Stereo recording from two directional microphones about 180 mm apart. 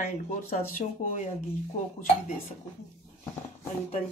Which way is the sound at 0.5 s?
45° left (ahead or behind).